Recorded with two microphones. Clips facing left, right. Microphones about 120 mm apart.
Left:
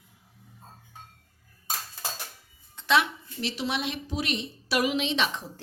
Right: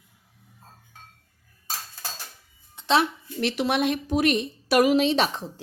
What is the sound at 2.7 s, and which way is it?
Music, 30° right (ahead or behind).